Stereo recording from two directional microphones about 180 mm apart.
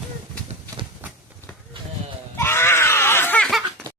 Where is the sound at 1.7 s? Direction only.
30° right (ahead or behind).